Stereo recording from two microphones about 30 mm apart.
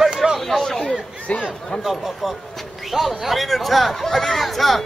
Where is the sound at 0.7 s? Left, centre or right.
Centre.